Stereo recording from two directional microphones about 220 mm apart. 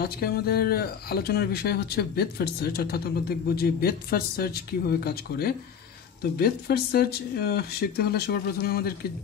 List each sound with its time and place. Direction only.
0.0 s speech: 45° left (ahead or behind)